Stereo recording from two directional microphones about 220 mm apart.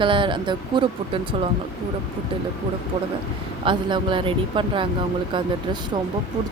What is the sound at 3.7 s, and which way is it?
Speech, 20° right (ahead or behind).